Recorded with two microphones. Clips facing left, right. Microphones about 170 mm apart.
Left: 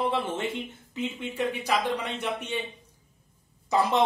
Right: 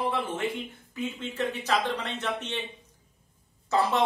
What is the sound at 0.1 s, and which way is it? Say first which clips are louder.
Speech: left 1 dB; 25° left (ahead or behind).